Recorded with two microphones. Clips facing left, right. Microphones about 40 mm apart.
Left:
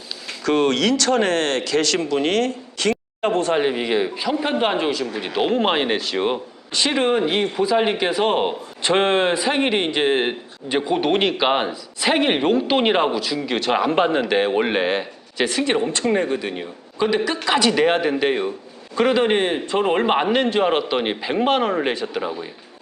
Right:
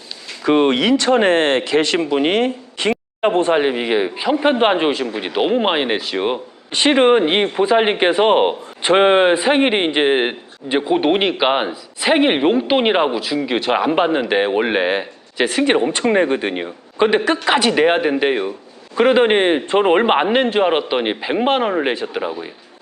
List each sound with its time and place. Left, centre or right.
0.4 s speech: right
5.0 s speech: right
6.7 s speech: right
17.7 s speech: centre